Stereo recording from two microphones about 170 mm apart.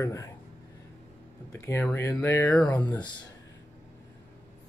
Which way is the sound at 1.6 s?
15° left (ahead or behind).